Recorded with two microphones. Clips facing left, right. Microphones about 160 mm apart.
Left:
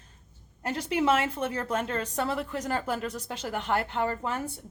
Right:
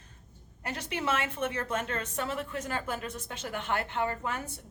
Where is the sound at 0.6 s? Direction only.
30° left (ahead or behind).